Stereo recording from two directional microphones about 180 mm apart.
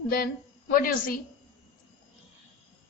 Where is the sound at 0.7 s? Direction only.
50° left (ahead or behind).